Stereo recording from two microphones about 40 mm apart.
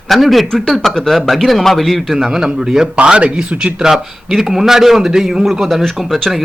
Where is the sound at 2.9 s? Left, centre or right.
Right.